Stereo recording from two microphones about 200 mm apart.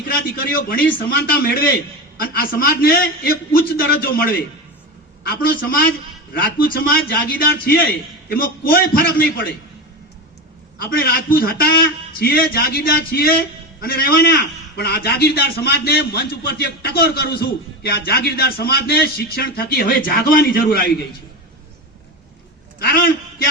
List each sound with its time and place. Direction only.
0.7 s a man's voice: 45° left (ahead or behind)
10.8 s a man's voice: 50° left (ahead or behind)